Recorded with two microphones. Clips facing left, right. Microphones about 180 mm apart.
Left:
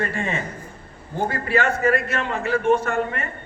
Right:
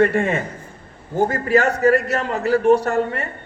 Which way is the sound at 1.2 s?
40° right (ahead or behind).